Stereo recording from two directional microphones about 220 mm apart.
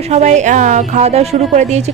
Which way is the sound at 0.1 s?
30° right (ahead or behind).